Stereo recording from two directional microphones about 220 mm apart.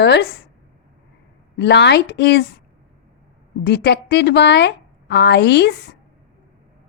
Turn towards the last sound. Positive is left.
turn(degrees=50)  # may be behind; listen again after turning